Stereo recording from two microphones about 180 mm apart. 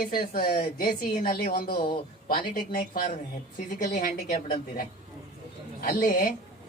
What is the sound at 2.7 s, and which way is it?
A man's voice, 50° left (ahead or behind).